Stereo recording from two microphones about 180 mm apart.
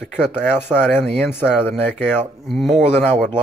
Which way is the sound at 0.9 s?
10° left (ahead or behind).